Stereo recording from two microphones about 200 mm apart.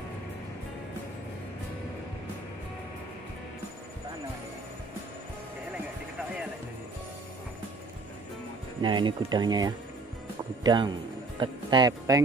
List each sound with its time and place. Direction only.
8.8 s speech: 25° right (ahead or behind)